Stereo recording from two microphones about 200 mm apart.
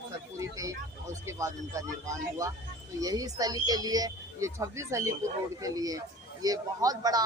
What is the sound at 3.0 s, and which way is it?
A man's voice, 20° right (ahead or behind).